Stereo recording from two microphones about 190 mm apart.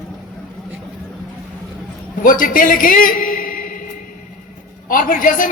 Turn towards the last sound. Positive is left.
turn(degrees=45)  # may be behind; listen again after turning